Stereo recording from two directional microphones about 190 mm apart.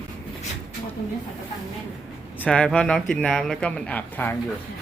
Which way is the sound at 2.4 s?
5° left (ahead or behind).